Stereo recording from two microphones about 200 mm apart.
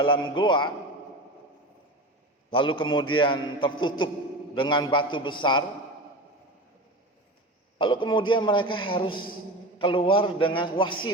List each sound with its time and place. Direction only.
0.3 s a man's voice: 25° left (ahead or behind)
2.5 s a man's voice: 25° left (ahead or behind)
7.8 s a man's voice: 25° left (ahead or behind)